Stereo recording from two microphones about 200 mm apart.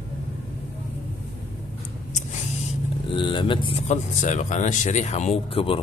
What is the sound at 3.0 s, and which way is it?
Speech, 25° left (ahead or behind).